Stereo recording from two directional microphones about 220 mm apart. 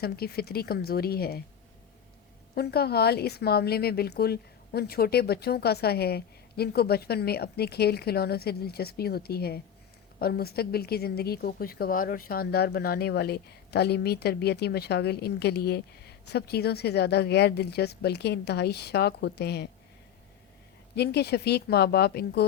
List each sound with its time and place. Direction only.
0.0 s a woman's voice: 45° left (ahead or behind)
2.6 s a woman's voice: 45° left (ahead or behind)
20.9 s a woman's voice: 50° left (ahead or behind)